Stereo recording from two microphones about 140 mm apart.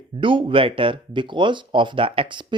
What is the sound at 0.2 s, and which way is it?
Speech, 35° right (ahead or behind).